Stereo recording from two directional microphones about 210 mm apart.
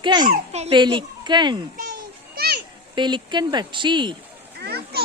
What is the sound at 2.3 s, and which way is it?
Children playing, 50° right (ahead or behind).